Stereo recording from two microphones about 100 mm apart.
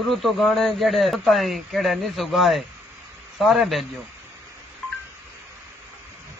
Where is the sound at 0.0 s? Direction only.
Centre (ahead or behind).